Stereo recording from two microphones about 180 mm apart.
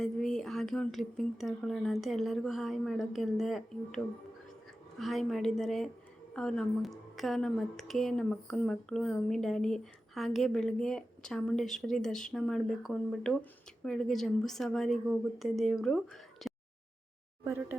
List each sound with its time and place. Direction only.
0.0 s speech: 5° left (ahead or behind)
17.4 s speech: 10° right (ahead or behind)